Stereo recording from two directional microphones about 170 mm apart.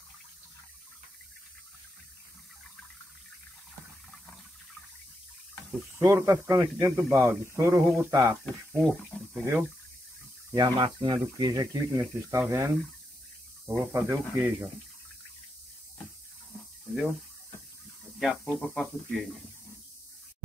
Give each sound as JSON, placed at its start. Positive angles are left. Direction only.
{"t": 5.9, "sound": "speech", "side_deg": -15}
{"t": 8.7, "sound": "speech", "side_deg": 0}
{"t": 10.5, "sound": "speech", "side_deg": -25}
{"t": 18.2, "sound": "speech", "side_deg": 5}